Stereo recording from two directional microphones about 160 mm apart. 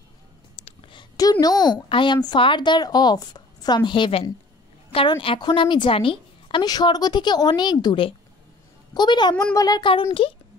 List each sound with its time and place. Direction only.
0.6 s a woman's voice: 35° left (ahead or behind)
9.6 s child singing: 25° left (ahead or behind)